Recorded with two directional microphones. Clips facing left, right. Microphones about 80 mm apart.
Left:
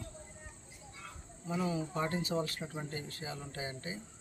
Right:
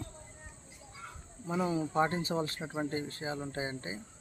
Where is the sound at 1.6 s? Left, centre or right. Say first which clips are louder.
Right 6 dB; right.